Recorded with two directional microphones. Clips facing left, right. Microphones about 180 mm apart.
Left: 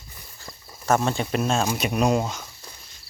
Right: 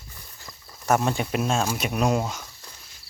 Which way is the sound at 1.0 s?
10° right (ahead or behind).